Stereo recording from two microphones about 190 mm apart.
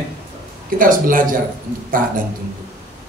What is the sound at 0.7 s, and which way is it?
Speech, 45° right (ahead or behind).